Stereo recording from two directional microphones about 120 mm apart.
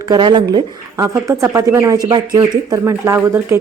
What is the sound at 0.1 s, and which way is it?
Speech, 35° right (ahead or behind).